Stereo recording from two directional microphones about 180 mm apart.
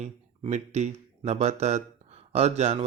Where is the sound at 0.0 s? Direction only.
40° right (ahead or behind).